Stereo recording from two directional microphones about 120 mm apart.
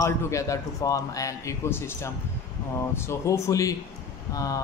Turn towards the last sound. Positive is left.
turn(degrees=30)  # may be behind; listen again after turning